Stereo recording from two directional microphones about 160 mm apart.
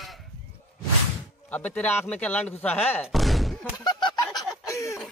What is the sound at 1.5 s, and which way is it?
Speech, 10° left (ahead or behind).